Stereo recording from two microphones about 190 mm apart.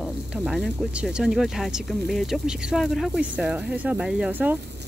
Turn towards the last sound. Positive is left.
turn(degrees=-10)  # may be behind; listen again after turning